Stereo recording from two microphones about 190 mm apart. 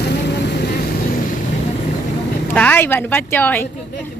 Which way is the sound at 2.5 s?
10° left (ahead or behind).